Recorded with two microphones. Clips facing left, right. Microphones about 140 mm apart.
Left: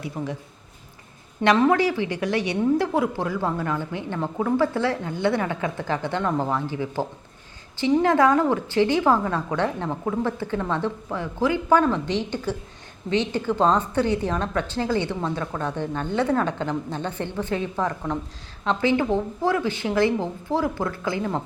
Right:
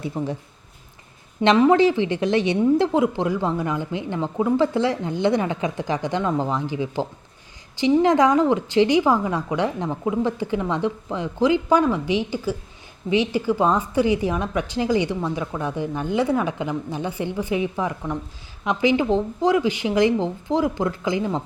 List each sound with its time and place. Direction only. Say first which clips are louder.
0.2 s speech: right 3 dB; 30° right (ahead or behind)
1.5 s a woman's voice: right 3 dB; 20° right (ahead or behind)